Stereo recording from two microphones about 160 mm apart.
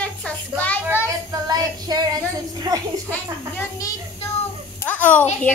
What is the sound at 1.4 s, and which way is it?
Child singing, 25° right (ahead or behind).